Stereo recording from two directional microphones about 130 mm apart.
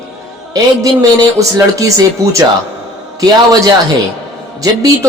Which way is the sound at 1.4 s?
25° right (ahead or behind).